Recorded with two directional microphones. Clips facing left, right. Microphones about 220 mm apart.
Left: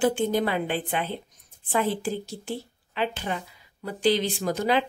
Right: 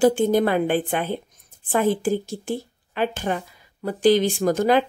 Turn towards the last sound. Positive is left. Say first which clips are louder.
# right 6 dB
turn(degrees=-45)  # may be behind; listen again after turning